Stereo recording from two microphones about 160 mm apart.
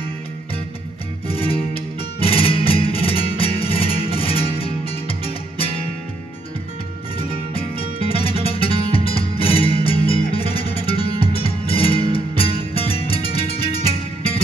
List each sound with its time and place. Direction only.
1.2 s music: 35° left (ahead or behind)
7.2 s music: 35° left (ahead or behind)